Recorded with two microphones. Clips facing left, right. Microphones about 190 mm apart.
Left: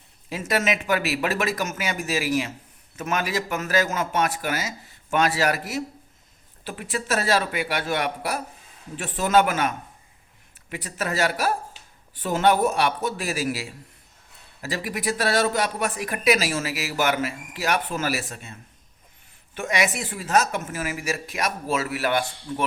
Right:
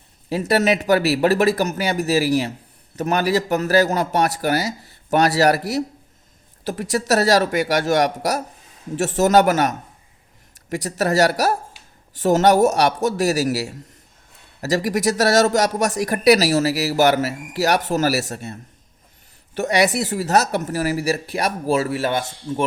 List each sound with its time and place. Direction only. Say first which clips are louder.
0.3 s speech: right 6 dB; 35° right (ahead or behind)
6.9 s speech: right 6 dB; 40° right (ahead or behind)
10.8 s speech: right 7 dB; 40° right (ahead or behind)